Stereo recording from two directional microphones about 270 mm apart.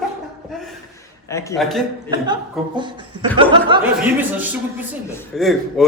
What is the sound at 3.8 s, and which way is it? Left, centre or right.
A man's voice, centre.